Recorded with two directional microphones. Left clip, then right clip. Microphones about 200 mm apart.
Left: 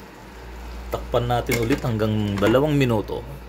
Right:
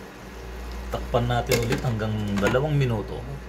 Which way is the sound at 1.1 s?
55° left (ahead or behind).